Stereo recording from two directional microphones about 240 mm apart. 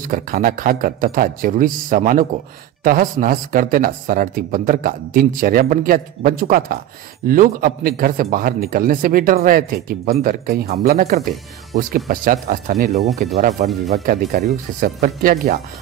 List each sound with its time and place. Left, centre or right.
0.0 s speech: right